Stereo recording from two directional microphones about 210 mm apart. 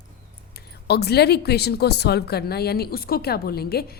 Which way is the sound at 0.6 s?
50° left (ahead or behind).